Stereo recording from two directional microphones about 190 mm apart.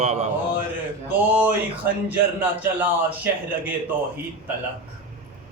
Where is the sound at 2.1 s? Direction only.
10° right (ahead or behind).